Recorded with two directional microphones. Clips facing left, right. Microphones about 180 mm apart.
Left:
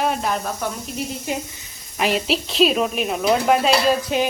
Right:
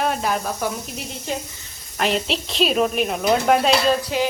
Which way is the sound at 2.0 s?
5° left (ahead or behind).